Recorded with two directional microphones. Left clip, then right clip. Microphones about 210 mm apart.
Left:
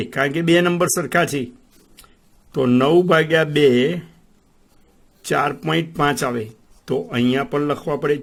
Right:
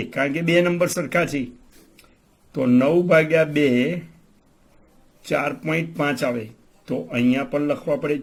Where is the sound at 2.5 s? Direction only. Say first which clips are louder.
Left 3 dB; 50° left (ahead or behind).